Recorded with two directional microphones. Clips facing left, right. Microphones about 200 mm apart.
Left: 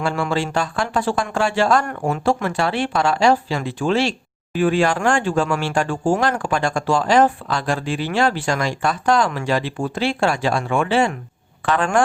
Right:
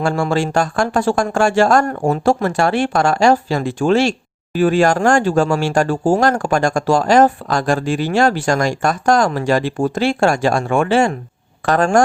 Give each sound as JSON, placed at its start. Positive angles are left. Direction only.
{"t": 0.0, "sound": "speech", "side_deg": -45}